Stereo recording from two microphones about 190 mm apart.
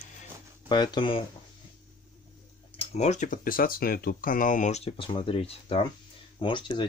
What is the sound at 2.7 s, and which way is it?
Speech, 35° left (ahead or behind).